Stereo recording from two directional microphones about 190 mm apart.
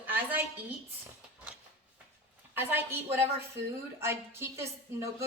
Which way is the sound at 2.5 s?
10° right (ahead or behind).